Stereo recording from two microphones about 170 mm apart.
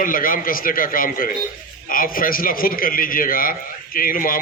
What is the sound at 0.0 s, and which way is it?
A man's voice, 55° left (ahead or behind).